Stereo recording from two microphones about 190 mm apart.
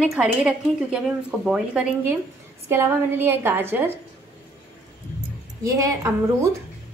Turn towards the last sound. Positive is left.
turn(degrees=-15)  # may be behind; listen again after turning